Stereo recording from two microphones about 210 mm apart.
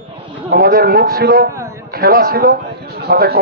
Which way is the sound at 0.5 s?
45° right (ahead or behind).